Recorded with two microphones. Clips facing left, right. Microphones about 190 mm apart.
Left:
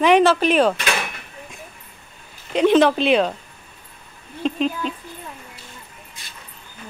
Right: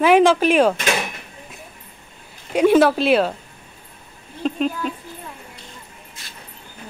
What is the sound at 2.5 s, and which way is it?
Speech, 10° right (ahead or behind).